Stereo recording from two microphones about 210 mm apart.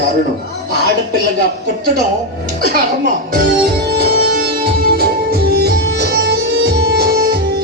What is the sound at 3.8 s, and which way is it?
Music, 45° right (ahead or behind).